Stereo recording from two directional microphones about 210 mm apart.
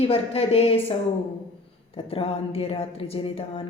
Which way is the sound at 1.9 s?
25° left (ahead or behind).